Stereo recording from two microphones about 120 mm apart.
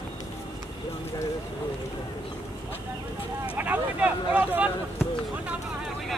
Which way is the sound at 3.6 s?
15° right (ahead or behind).